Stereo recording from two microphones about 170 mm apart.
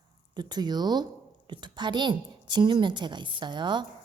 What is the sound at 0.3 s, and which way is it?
A woman's voice, 25° right (ahead or behind).